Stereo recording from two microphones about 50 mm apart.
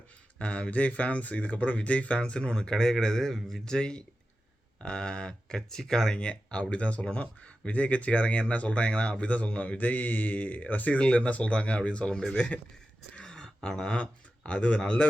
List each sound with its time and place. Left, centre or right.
0.3 s speech: left
6.1 s speech: left